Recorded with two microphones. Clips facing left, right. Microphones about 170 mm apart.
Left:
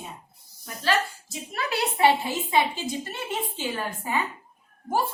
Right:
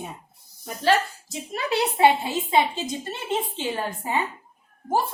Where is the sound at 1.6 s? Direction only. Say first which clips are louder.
Right 3 dB; 20° right (ahead or behind).